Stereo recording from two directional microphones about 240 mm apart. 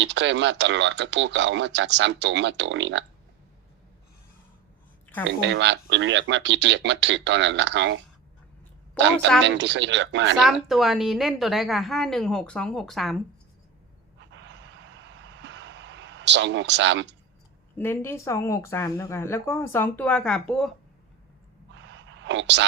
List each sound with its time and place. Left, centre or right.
0.0 s speech: right
5.4 s speech: right
9.4 s speech: right
10.3 s a woman's voice: centre
14.2 s vehicle: right
17.7 s speech: centre
21.8 s a sound: right